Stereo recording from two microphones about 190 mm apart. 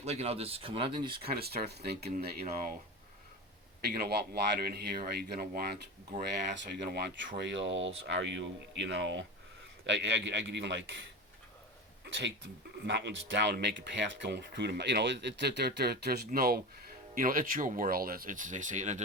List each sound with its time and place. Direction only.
0.0 s speech: 35° right (ahead or behind)
1.4 s speech: 55° right (ahead or behind)
3.8 s speech: 55° right (ahead or behind)
6.5 s speech: 70° right (ahead or behind)
12.8 s speech: 65° right (ahead or behind); by 19.0 s 40° right (ahead or behind)